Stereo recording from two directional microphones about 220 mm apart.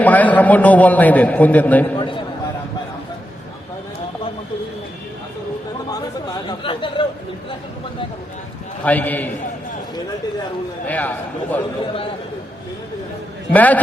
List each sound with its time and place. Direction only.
0.0 s a man's voice: 5° left (ahead or behind)
2.0 s a sound: 25° left (ahead or behind)
5.9 s chatter: 15° left (ahead or behind)
8.8 s a man's voice: 5° left (ahead or behind)
10.8 s a man's voice: 5° left (ahead or behind)
13.5 s a man's voice: 5° left (ahead or behind)